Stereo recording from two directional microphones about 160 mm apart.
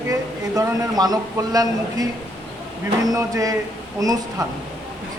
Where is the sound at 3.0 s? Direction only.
20° right (ahead or behind).